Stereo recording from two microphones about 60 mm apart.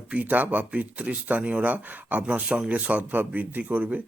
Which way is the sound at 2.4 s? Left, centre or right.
Centre.